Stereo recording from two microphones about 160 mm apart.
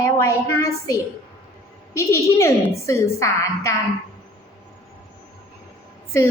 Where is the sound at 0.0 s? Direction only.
15° left (ahead or behind).